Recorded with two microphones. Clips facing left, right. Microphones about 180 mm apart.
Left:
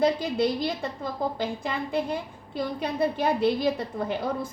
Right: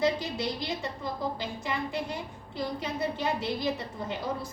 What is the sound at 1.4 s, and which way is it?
A woman's voice, 55° left (ahead or behind).